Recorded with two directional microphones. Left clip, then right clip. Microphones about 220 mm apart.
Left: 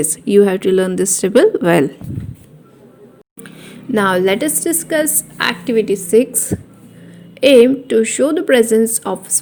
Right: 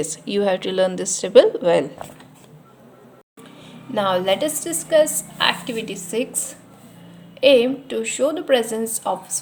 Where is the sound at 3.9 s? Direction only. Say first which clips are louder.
Left 5 dB; 30° left (ahead or behind).